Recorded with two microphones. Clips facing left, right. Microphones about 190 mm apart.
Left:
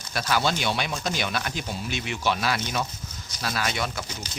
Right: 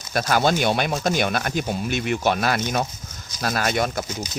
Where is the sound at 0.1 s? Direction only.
50° right (ahead or behind).